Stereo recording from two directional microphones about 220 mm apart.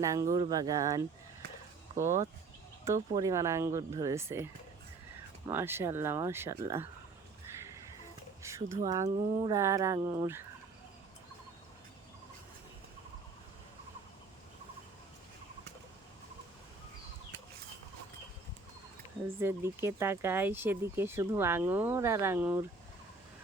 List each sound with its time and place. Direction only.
0.0 s speech: 15° right (ahead or behind)
2.8 s speech: 15° right (ahead or behind)
5.5 s speech: 10° right (ahead or behind)
8.4 s speech: 15° right (ahead or behind)
19.4 s speech: 10° right (ahead or behind)